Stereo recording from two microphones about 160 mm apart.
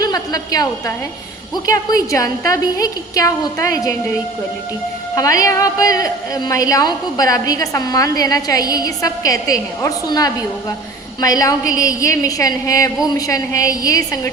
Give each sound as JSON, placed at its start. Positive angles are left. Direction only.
{"t": 0.0, "sound": "a woman's voice", "side_deg": 25}
{"t": 5.1, "sound": "a woman's voice", "side_deg": 20}